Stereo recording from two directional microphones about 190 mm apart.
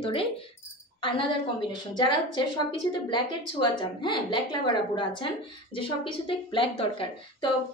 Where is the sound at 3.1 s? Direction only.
25° left (ahead or behind).